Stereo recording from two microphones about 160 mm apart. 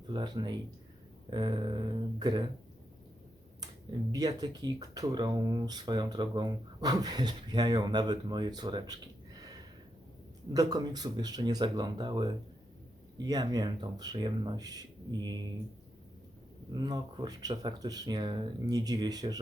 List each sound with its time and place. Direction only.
0.1 s speech: 30° right (ahead or behind)
4.1 s speech: 25° right (ahead or behind)
9.4 s a sound: 25° right (ahead or behind)
10.5 s speech: 25° right (ahead or behind)
16.7 s speech: 25° right (ahead or behind)